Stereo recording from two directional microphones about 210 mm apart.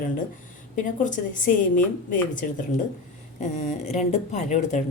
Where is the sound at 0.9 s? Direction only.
40° left (ahead or behind).